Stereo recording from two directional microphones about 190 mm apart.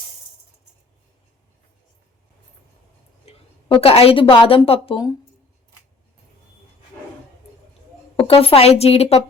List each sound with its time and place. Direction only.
3.2 s speech: 30° left (ahead or behind)
8.1 s a woman's voice: 30° left (ahead or behind)